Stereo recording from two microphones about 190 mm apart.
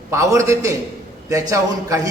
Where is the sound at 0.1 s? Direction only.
15° right (ahead or behind).